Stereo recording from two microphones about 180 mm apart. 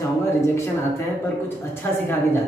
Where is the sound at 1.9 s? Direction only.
10° left (ahead or behind).